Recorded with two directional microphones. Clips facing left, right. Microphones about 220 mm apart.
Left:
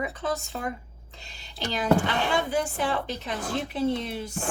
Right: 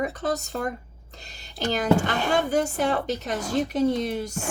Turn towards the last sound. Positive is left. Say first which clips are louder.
# right 4 dB
turn(degrees=-40)  # may be behind; listen again after turning